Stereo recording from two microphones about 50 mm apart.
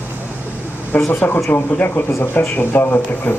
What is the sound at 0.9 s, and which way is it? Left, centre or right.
Speech, left.